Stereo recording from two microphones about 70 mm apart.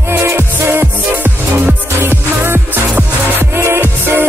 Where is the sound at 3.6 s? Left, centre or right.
Right.